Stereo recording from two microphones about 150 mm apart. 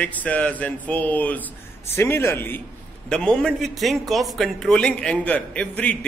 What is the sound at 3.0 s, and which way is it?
A man's voice, 5° left (ahead or behind).